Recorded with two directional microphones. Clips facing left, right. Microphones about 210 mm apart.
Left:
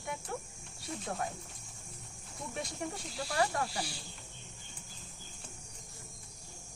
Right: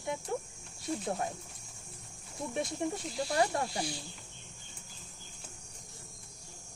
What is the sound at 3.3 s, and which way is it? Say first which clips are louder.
Speech: right 2 dB; 25° right (ahead or behind).